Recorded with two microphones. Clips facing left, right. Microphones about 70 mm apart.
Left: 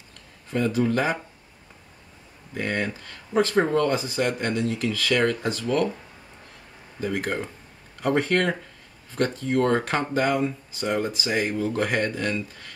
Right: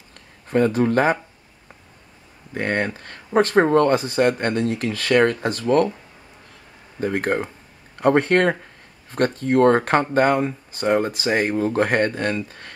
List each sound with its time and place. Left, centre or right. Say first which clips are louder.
0.5 s speech: right 5 dB; right
2.5 s speech: right 4 dB; right
7.0 s speech: right 5 dB; right